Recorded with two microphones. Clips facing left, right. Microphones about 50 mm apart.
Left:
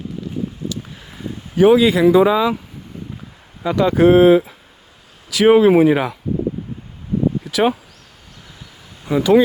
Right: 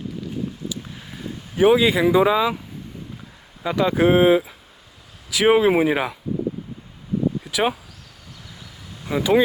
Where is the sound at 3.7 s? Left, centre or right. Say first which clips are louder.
Left 5 dB; centre.